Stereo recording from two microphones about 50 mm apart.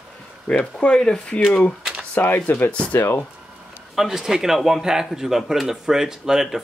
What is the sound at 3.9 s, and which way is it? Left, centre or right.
Speech, centre.